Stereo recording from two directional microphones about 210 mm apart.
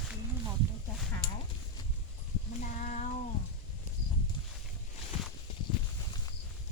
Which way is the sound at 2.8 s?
35° left (ahead or behind).